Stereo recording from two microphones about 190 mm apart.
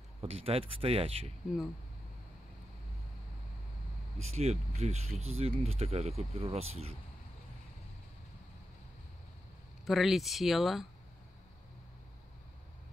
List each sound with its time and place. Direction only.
0.2 s speech: 30° right (ahead or behind)
4.2 s speech: 35° right (ahead or behind)
9.8 s speech: centre (ahead or behind)